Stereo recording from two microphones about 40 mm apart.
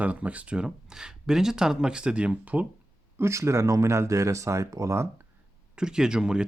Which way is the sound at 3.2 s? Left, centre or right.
Right.